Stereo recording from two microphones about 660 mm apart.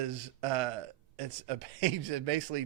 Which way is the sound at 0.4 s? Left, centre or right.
Right.